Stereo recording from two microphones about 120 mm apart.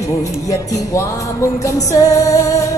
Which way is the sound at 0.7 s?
25° left (ahead or behind).